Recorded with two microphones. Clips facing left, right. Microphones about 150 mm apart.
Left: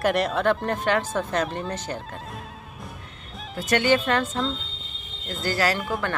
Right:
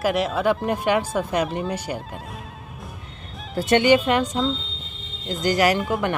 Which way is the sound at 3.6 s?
25° right (ahead or behind).